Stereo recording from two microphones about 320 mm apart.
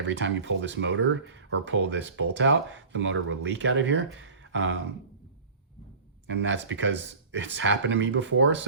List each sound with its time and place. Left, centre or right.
0.1 s speech: right
6.2 s speech: right